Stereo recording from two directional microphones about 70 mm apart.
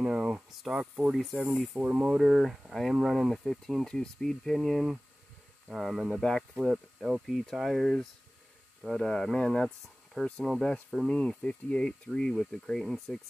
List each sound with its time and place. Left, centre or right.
0.0 s a sound: centre
0.5 s speech: centre
0.7 s speech: centre
1.1 s speech: centre
1.8 s speech: centre
2.1 s speech: centre
10.2 s speech: centre
10.6 s speech: centre